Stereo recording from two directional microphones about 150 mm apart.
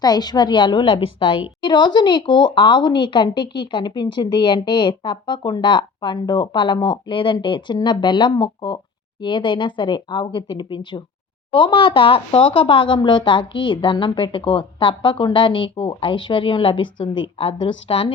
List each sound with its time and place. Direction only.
0.0 s a woman's voice: 25° left (ahead or behind)